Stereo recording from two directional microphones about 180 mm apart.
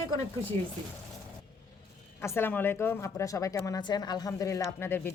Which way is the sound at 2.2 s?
15° left (ahead or behind).